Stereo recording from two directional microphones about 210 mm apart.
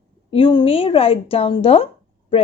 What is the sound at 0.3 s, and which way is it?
Speech, 25° left (ahead or behind).